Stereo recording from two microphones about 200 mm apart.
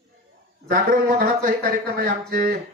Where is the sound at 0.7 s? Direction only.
45° right (ahead or behind).